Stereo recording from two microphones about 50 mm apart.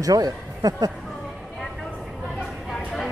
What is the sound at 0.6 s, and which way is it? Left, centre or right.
Speech, right.